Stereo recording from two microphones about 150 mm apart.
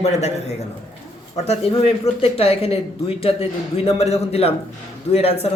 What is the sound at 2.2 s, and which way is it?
A woman's voice, 40° left (ahead or behind).